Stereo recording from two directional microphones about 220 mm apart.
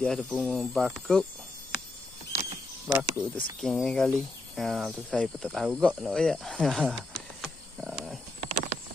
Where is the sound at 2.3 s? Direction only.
30° right (ahead or behind).